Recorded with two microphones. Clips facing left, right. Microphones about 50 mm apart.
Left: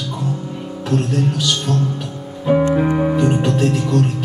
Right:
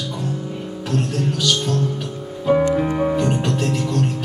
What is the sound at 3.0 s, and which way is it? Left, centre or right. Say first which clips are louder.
Music: left 3 dB; centre.